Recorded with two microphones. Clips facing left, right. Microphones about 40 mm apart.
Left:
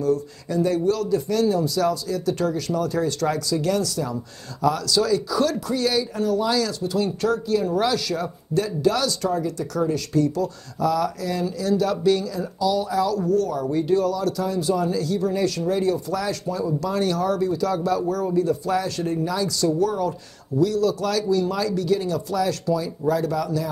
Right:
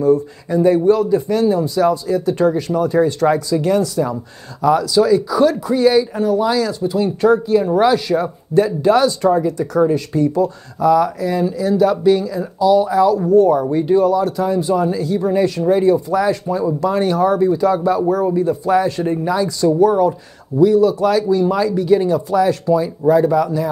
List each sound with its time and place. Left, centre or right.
0.0 s speech: right